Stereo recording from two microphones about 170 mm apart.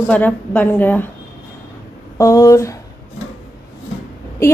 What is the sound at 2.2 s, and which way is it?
Speech, 15° left (ahead or behind).